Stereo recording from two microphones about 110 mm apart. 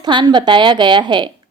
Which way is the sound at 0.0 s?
40° right (ahead or behind).